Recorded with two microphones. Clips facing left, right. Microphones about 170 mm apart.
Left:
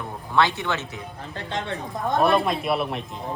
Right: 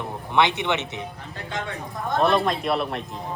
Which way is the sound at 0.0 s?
20° right (ahead or behind).